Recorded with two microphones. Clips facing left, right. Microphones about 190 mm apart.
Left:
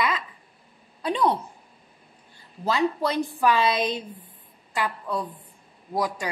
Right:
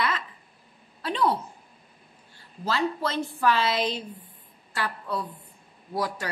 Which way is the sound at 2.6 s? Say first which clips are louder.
Left 3 dB; 15° left (ahead or behind).